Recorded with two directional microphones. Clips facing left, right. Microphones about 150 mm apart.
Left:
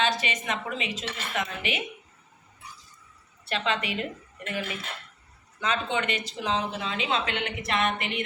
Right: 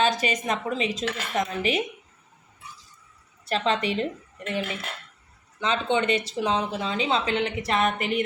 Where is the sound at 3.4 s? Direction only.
35° right (ahead or behind).